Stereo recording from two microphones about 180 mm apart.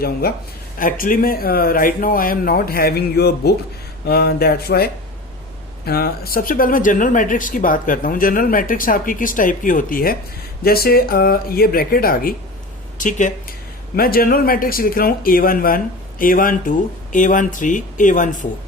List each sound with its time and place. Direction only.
0.0 s speech: 60° left (ahead or behind)
13.9 s speech: 55° left (ahead or behind)